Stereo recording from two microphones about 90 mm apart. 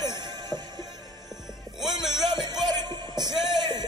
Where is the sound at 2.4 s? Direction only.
50° right (ahead or behind).